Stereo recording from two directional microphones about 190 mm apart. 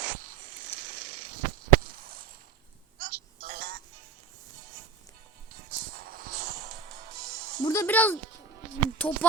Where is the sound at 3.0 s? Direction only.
50° right (ahead or behind).